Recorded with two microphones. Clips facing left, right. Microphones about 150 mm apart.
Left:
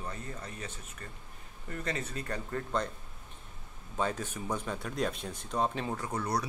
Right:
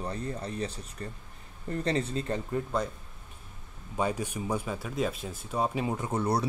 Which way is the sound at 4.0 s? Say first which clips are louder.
Right 3 dB; 10° right (ahead or behind).